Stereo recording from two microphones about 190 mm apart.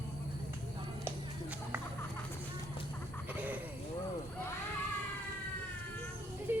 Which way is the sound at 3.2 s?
10° right (ahead or behind).